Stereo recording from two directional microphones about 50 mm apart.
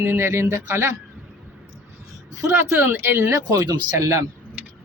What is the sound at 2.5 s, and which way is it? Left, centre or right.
Speech, right.